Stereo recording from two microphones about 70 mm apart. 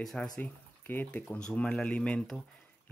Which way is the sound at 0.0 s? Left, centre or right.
Centre.